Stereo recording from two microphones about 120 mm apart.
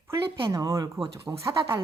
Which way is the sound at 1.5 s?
45° right (ahead or behind).